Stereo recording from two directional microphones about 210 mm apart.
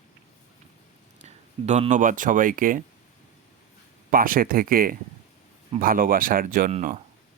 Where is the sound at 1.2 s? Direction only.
30° right (ahead or behind).